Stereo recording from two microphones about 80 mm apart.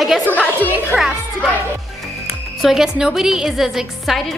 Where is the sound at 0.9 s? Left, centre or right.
Centre.